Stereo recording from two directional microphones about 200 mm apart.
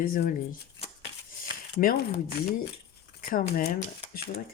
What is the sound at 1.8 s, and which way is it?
Speech, 45° left (ahead or behind).